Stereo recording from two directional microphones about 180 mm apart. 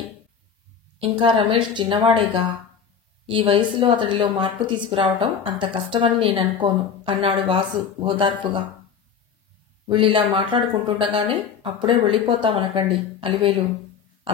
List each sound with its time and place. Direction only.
0.9 s speech: 30° right (ahead or behind)
9.8 s speech: 30° right (ahead or behind)